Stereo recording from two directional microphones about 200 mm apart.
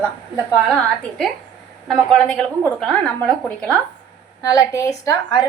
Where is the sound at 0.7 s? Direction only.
Centre (ahead or behind).